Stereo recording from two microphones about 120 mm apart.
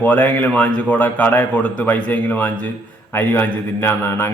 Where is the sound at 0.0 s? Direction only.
15° left (ahead or behind).